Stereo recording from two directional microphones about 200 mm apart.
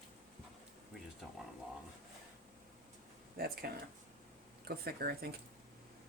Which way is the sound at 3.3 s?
50° right (ahead or behind).